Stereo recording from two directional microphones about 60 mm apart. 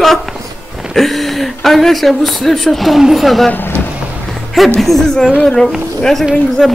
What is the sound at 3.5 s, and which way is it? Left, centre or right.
Vehicle, left.